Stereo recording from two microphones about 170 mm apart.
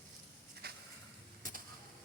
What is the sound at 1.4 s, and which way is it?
Mechanisms, 55° right (ahead or behind).